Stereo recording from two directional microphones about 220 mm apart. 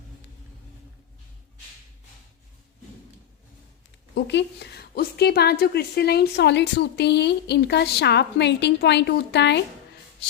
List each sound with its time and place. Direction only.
4.1 s a woman's voice: 50° left (ahead or behind)